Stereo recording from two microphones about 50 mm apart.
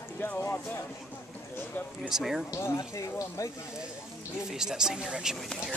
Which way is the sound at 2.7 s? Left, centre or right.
Left.